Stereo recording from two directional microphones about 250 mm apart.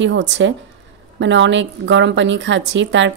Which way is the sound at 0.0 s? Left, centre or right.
Right.